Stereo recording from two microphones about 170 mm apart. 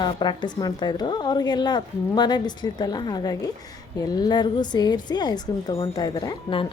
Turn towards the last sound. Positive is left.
turn(degrees=25)  # may be behind; listen again after turning